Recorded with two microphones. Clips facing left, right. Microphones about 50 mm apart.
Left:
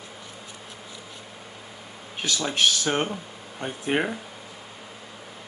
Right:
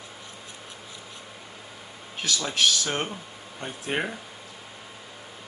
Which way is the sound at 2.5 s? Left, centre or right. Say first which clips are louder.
Left 2 dB; left.